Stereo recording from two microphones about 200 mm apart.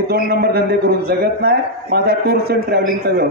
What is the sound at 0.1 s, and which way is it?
A man's voice, 50° right (ahead or behind).